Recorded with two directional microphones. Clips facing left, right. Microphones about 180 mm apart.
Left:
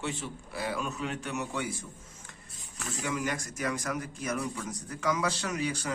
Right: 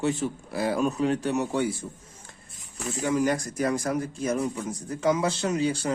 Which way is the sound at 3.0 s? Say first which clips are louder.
Right 9 dB; 35° right (ahead or behind).